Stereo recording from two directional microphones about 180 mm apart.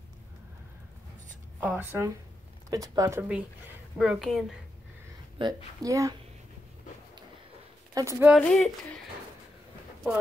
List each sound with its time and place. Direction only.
1.6 s a woman's voice: 10° right (ahead or behind)
5.4 s a child's voice: 25° right (ahead or behind)
7.9 s speech: 15° right (ahead or behind)
8.4 s a woman's voice: 5° left (ahead or behind)